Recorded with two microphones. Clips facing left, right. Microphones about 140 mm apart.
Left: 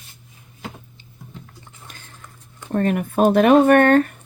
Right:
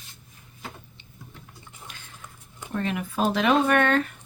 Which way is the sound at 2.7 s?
50° left (ahead or behind).